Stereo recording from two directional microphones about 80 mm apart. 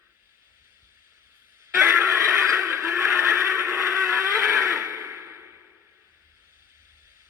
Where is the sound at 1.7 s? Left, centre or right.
Right.